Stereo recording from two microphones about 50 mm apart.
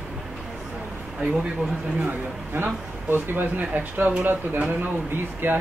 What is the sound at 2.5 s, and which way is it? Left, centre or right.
Speech, right.